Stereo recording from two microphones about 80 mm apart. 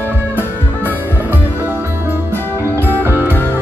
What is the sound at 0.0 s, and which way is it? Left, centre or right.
Music, right.